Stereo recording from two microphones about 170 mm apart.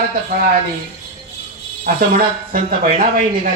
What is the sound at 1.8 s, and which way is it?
Speech, 60° right (ahead or behind).